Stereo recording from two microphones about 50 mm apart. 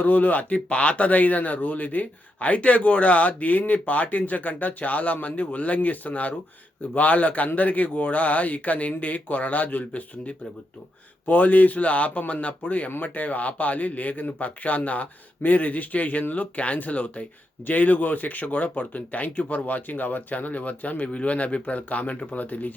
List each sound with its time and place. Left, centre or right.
0.0 s speech: left